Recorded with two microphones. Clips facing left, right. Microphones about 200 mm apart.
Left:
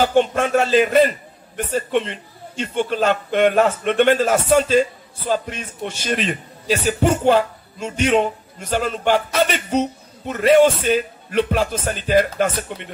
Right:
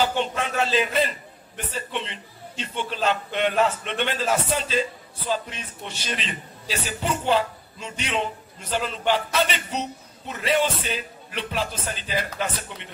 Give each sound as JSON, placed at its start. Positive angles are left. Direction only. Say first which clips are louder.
{"t": 0.0, "sound": "a man's voice", "louder": "left 8 dB", "side_deg": 50}